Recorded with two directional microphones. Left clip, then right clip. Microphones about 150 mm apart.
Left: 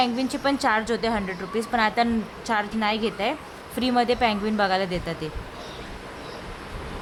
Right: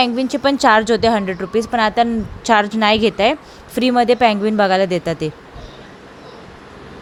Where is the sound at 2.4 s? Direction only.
50° right (ahead or behind).